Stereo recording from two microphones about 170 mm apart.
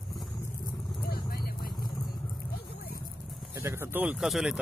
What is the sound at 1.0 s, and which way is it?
Vehicle, 60° left (ahead or behind).